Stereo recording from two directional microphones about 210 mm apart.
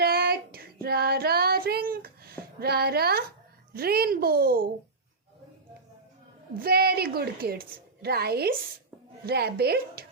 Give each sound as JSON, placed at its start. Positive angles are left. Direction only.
{"t": 0.0, "sound": "child singing", "side_deg": -45}
{"t": 2.6, "sound": "a woman's voice", "side_deg": -50}
{"t": 6.6, "sound": "a woman's voice", "side_deg": -45}